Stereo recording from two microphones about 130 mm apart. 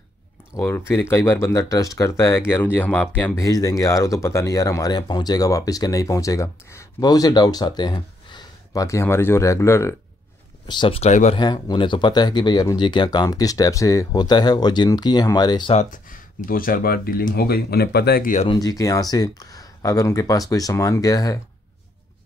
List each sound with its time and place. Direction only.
0.6 s speech: 20° left (ahead or behind)
3.4 s speech: 25° left (ahead or behind)
10.7 s speech: 40° left (ahead or behind)
11.1 s speech: 65° left (ahead or behind)
11.3 s speech: 35° left (ahead or behind)
15.7 s speech: 80° left
18.5 s speech: 30° left (ahead or behind)